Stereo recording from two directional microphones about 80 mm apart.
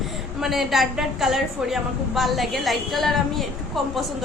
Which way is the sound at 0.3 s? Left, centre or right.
Centre.